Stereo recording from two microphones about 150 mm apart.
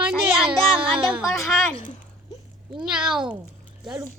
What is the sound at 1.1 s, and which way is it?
Speech, 10° right (ahead or behind).